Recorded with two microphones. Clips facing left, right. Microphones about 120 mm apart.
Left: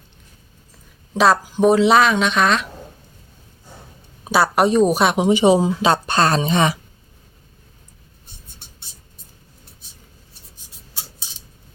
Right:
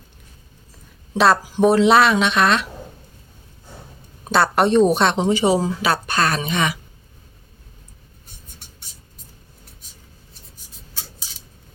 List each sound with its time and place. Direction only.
1.1 s speech: centre (ahead or behind)
4.2 s a woman's voice: 5° left (ahead or behind); by 6.7 s 30° left (ahead or behind)